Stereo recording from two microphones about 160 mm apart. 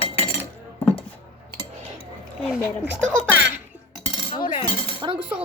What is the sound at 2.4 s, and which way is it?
Speech, 10° right (ahead or behind).